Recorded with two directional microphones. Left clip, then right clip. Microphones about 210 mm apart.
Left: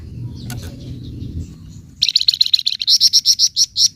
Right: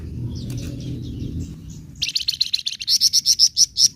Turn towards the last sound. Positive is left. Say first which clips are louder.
# left 2 dB
turn(degrees=15)  # may be behind; listen again after turning